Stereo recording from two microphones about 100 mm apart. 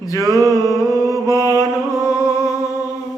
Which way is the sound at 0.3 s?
30° left (ahead or behind).